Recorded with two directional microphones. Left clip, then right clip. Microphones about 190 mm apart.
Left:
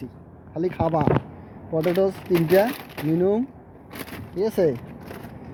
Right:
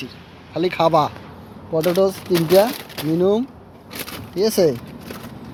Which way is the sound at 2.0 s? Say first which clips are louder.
Right 4 dB; 15° right (ahead or behind).